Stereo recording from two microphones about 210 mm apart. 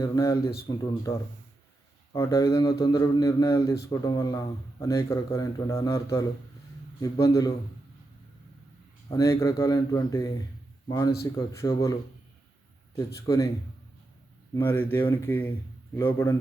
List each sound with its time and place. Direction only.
0.0 s a man's voice: 15° left (ahead or behind)
2.1 s a man's voice: 15° left (ahead or behind)
9.0 s a man's voice: 15° left (ahead or behind)
13.1 s a man's voice: 15° left (ahead or behind)
14.5 s a man's voice: 10° left (ahead or behind)